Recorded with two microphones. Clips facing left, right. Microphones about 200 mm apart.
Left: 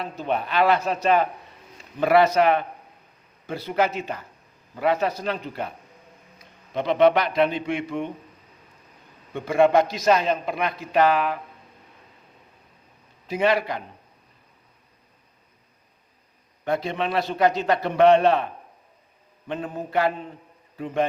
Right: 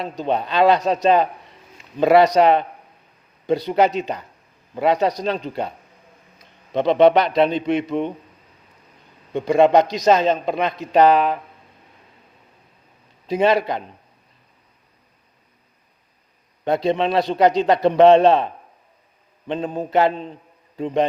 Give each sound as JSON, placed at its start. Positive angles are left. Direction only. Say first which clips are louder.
{"t": 0.3, "sound": "a man's voice", "louder": "right 4 dB", "side_deg": -25}
{"t": 2.0, "sound": "a man's voice", "louder": "right 4 dB", "side_deg": -25}
{"t": 3.7, "sound": "a man's voice", "louder": "right 3 dB", "side_deg": -20}
{"t": 9.3, "sound": "a man's voice", "louder": "right 4 dB", "side_deg": -20}
{"t": 13.3, "sound": "a man's voice", "louder": "right 4 dB", "side_deg": -25}
{"t": 16.6, "sound": "a man's voice", "louder": "right 6 dB", "side_deg": -30}